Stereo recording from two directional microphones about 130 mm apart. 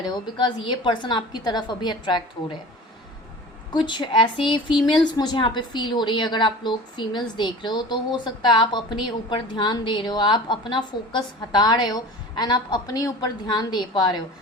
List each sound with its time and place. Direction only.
0.0 s a woman's voice: 35° left (ahead or behind)
3.7 s a woman's voice: 35° left (ahead or behind)